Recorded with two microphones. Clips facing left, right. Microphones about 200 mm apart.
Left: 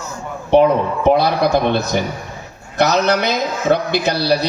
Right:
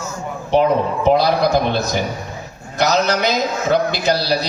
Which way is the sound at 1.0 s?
60° left (ahead or behind).